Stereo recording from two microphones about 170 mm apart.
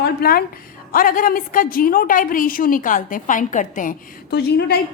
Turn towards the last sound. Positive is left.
turn(degrees=70)  # may be behind; listen again after turning